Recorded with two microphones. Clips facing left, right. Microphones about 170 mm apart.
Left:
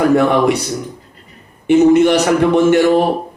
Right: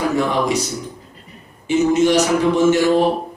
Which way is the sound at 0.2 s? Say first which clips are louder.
Left 5 dB; 60° left (ahead or behind).